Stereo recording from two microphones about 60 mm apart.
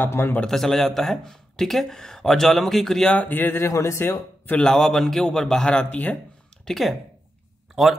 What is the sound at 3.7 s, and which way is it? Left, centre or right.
Speech, left.